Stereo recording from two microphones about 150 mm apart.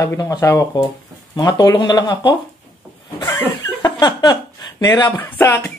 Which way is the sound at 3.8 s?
30° left (ahead or behind).